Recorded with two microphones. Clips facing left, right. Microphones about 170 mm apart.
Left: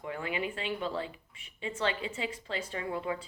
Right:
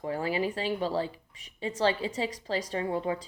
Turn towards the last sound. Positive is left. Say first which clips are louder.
# right 5 dB
turn(degrees=-35)  # may be behind; listen again after turning